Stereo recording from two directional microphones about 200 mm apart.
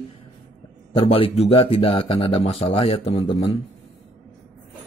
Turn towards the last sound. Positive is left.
turn(degrees=25)  # may be behind; listen again after turning